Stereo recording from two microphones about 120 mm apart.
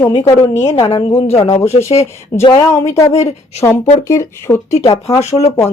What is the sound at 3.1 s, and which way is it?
Speech, 65° left (ahead or behind).